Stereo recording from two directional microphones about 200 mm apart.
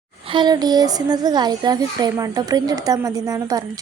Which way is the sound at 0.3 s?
20° right (ahead or behind).